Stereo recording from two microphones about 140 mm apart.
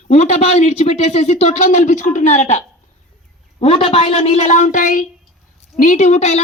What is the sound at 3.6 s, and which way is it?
Speech, 40° left (ahead or behind).